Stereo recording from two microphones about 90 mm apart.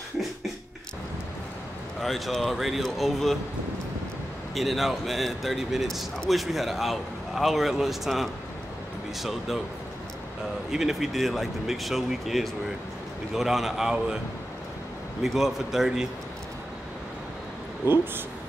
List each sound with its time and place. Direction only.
2.0 s a man's voice: centre (ahead or behind)
4.6 s a man's voice: centre (ahead or behind)
10.7 s a man's voice: 5° right (ahead or behind)
15.2 s a man's voice: 5° right (ahead or behind)
17.8 s speech: 20° right (ahead or behind)